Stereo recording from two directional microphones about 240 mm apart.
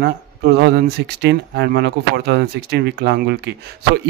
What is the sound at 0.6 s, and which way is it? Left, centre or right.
Speech, right.